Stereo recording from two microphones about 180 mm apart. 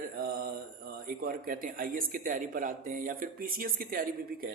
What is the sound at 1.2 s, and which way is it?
Speech, 50° right (ahead or behind).